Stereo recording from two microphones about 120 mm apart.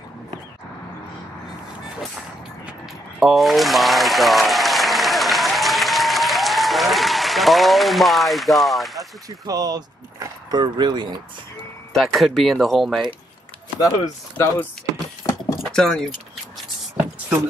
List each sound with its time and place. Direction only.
3.2 s applause: centre (ahead or behind)
9.5 s speech: 30° right (ahead or behind)
11.9 s speech: centre (ahead or behind)
13.7 s speech: 30° left (ahead or behind)
15.2 s a sound: 25° left (ahead or behind)
15.6 s speech: 5° left (ahead or behind)